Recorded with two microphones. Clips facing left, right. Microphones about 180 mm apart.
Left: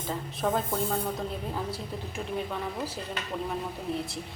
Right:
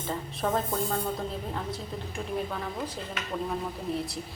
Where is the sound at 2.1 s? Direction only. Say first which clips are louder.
Even; 5° left (ahead or behind).